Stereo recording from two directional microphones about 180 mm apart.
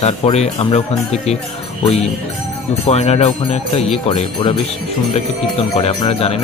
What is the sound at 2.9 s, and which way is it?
Speech, 35° left (ahead or behind).